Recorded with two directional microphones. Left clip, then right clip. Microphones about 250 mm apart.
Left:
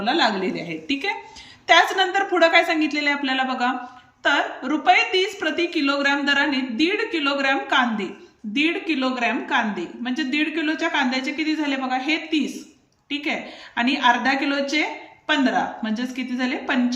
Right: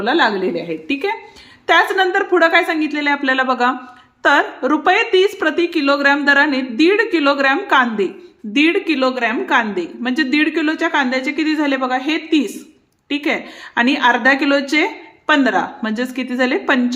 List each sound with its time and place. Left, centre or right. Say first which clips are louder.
0.0 s a woman's voice: right 5 dB; centre